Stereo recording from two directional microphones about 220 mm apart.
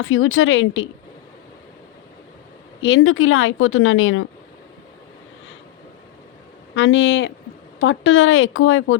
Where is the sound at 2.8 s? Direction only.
60° left (ahead or behind).